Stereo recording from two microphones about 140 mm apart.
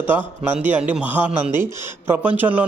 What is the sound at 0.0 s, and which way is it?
A man's voice, 15° right (ahead or behind).